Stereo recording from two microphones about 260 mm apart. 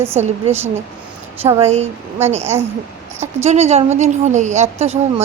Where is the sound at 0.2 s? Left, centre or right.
Right.